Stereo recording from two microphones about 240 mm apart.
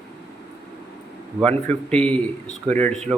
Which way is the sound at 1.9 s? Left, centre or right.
Centre.